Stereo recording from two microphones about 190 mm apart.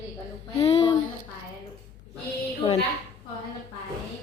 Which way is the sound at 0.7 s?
30° left (ahead or behind).